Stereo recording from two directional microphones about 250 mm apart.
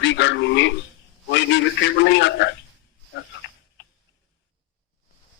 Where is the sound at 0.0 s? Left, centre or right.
Left.